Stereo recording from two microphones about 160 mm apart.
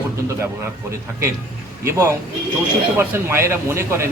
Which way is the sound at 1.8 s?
15° right (ahead or behind).